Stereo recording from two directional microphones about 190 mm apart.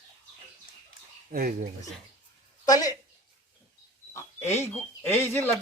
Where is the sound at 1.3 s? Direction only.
50° right (ahead or behind).